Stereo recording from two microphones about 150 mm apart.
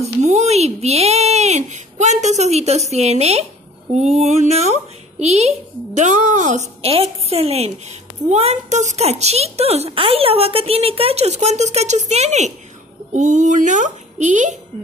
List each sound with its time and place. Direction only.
0.0 s speech: 50° right (ahead or behind)
6.8 s a woman's voice: 40° right (ahead or behind)